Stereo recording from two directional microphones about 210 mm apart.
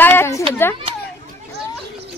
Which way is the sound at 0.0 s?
10° left (ahead or behind).